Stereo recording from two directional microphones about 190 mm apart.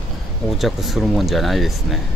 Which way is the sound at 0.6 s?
Centre (ahead or behind).